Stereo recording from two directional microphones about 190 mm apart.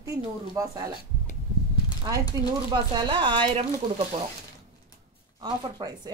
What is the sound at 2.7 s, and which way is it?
Speech, 25° right (ahead or behind).